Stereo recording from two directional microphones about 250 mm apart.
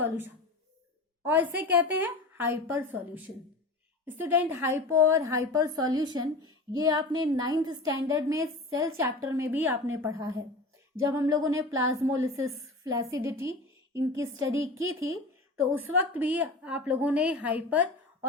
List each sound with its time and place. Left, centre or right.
1.2 s a woman's voice: centre